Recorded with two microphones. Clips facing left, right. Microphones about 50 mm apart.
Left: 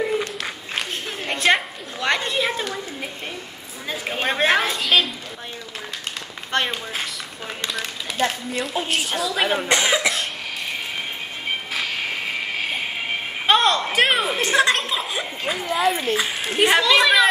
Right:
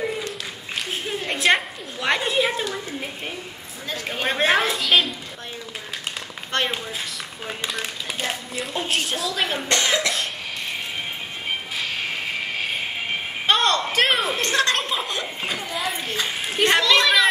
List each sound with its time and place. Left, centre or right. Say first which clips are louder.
1.2 s a sound: left 1 dB; centre
3.9 s speech: left 1 dB; centre
4.3 s a woman's voice: even; centre
6.5 s speech: left 1 dB; centre
7.4 s a sound: even; centre
8.7 s a woman's voice: right 1 dB; centre
9.3 s speech: left 5 dB; centre
11.9 s train: left 1 dB; centre
13.5 s a sound: left 2 dB; centre
16.5 s speech: left 2 dB; centre